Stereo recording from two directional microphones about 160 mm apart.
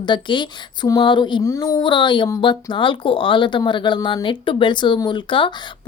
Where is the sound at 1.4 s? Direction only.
20° left (ahead or behind).